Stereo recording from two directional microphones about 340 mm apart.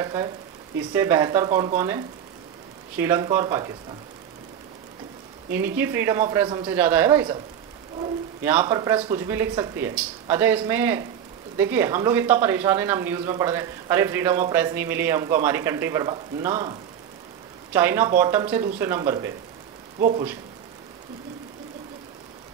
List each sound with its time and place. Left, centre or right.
0.0 s speech: centre
5.5 s speech: centre
8.5 s speech: centre
17.7 s speech: centre
20.0 s speech: right